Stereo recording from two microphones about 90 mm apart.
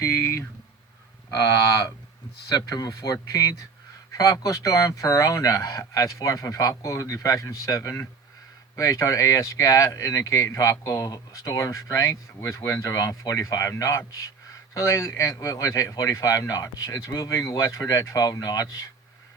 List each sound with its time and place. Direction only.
0.0 s speech: 35° left (ahead or behind)